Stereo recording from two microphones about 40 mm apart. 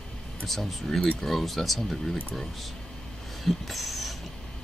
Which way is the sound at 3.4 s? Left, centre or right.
Centre.